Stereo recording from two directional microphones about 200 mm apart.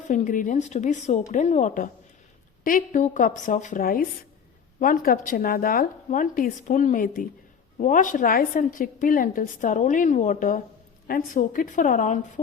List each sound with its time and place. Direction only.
0.1 s a woman's voice: 40° left (ahead or behind)